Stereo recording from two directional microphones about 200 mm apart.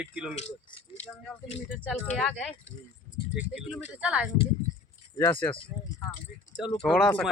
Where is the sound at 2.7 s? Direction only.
25° left (ahead or behind).